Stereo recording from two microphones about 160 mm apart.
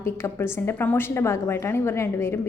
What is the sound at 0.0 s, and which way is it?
A woman's voice, 15° left (ahead or behind).